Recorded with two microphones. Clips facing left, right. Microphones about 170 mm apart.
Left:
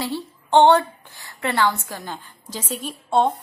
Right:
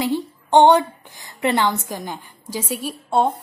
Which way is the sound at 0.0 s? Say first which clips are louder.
Right 5 dB; 15° right (ahead or behind).